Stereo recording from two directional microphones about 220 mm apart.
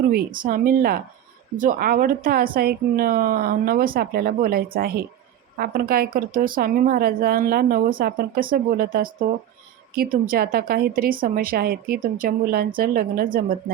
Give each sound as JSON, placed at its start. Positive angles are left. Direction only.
{"t": 0.1, "sound": "speech", "side_deg": -40}